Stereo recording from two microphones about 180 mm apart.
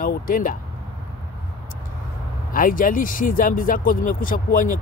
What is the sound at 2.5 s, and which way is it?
Speech, 50° left (ahead or behind).